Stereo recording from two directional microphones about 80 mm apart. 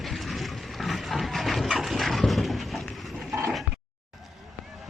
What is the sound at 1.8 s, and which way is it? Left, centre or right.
Dog, centre.